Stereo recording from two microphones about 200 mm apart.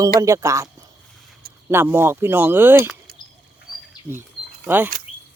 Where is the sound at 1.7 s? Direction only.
10° right (ahead or behind).